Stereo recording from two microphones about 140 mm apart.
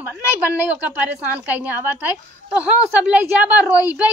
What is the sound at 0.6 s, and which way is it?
A woman's voice, 10° right (ahead or behind).